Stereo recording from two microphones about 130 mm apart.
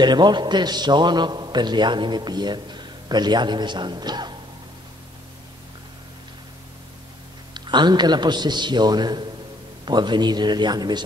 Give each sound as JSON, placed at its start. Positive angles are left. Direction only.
{"t": 0.0, "sound": "a man's voice", "side_deg": -35}
{"t": 7.5, "sound": "a man's voice", "side_deg": -35}